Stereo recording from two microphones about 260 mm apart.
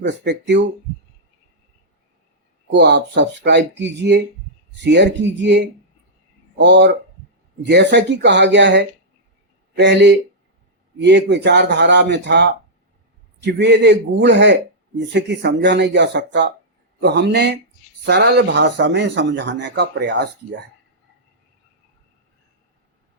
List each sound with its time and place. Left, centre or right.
0.0 s speech: right
2.7 s speech: right